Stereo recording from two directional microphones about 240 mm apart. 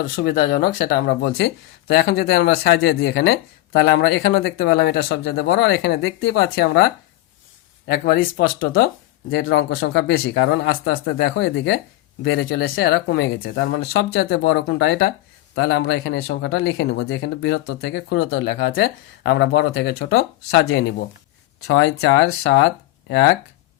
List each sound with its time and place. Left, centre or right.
0.0 s speech: left
7.9 s speech: left
21.7 s speech: left